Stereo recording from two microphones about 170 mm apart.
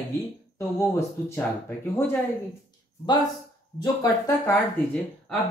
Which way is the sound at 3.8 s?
20° left (ahead or behind).